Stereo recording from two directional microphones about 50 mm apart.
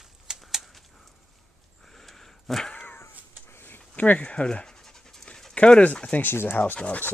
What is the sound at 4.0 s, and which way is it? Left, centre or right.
Speech, left.